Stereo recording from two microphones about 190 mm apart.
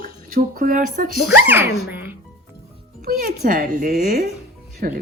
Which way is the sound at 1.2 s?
10° right (ahead or behind).